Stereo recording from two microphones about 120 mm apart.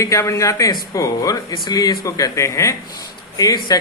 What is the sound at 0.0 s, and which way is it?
Speech, 25° left (ahead or behind).